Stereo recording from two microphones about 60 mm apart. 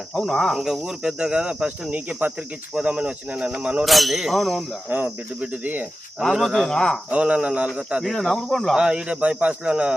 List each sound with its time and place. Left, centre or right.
0.1 s speech: centre
0.5 s speech: centre
1.9 s cricket: right
2.7 s speech: centre
3.8 s speech: centre
4.9 s cricket: right
6.1 s speech: centre
7.1 s cricket: right
7.7 s speech: centre
8.0 s speech: centre
8.7 s speech: centre